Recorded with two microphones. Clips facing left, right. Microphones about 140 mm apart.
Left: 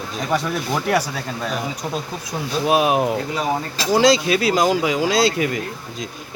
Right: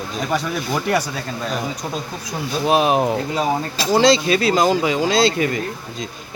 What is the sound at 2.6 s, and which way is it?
Speech, 5° left (ahead or behind).